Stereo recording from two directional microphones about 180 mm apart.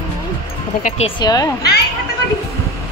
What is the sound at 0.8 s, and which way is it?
Speech, 35° left (ahead or behind).